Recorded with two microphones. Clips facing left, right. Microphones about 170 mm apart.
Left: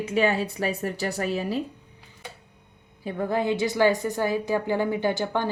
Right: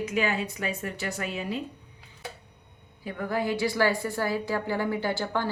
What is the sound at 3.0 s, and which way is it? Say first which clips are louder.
A woman's voice: left 4 dB; 25° left (ahead or behind).